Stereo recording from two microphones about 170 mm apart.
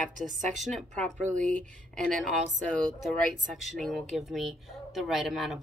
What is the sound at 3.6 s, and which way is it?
Speech, centre (ahead or behind).